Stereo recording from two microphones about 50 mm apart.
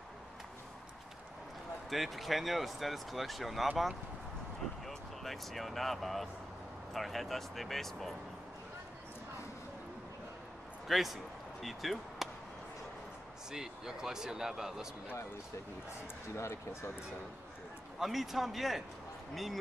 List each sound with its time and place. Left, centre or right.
1.9 s speech: centre
4.8 s speech: centre
10.9 s speech: centre
13.5 s speech: centre
16.3 s speech: left
17.9 s speech: centre